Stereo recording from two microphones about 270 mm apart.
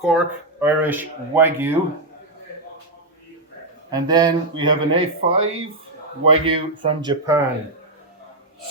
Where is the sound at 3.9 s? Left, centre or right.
Centre.